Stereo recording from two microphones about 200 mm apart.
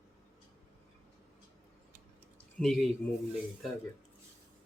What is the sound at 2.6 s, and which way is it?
Speech, centre (ahead or behind).